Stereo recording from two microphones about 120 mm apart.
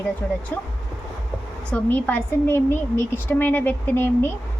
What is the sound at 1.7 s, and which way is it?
A woman's voice, 15° left (ahead or behind).